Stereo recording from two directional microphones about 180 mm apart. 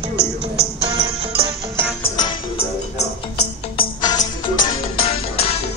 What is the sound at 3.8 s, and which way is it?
Music, 20° left (ahead or behind).